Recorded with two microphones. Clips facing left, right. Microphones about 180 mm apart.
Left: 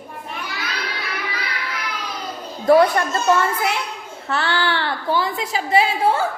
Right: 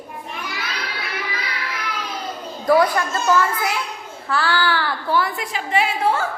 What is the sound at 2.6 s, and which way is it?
A child's voice, 25° left (ahead or behind).